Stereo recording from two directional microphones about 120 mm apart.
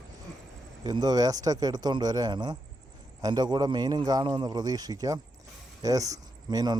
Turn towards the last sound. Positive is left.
turn(degrees=-30)  # may be behind; listen again after turning